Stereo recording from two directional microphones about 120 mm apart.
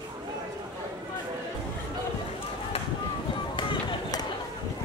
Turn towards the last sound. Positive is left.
turn(degrees=40)  # may be behind; listen again after turning